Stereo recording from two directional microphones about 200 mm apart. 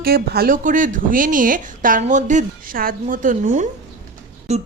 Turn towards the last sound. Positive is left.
turn(degrees=-35)  # may be behind; listen again after turning